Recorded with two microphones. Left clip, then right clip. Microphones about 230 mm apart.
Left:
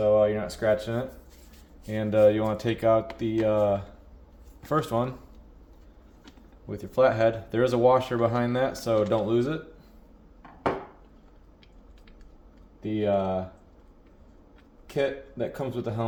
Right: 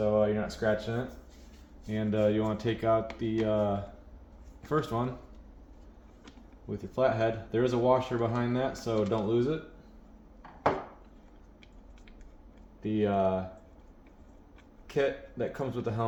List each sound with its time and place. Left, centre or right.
0.0 s a sound: left
1.9 s speech: left
6.7 s speech: left
12.8 s speech: left
14.9 s speech: left